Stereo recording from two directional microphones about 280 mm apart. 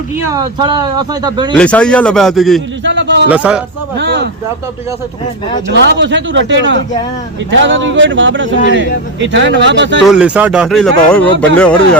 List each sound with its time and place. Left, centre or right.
0.3 s speech: centre
1.5 s speech: centre
2.8 s a sound: right
3.2 s speech: centre
3.9 s speech: right
5.6 s a man's voice: right
10.0 s speech: centre